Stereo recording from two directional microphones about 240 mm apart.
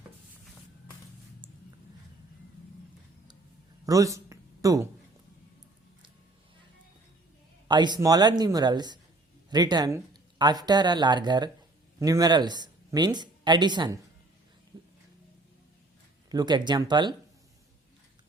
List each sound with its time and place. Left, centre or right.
3.8 s speech: centre
7.7 s speech: centre
14.7 s a sound: centre
16.3 s speech: centre